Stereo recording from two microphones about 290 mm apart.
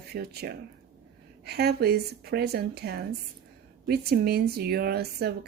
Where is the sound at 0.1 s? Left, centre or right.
Right.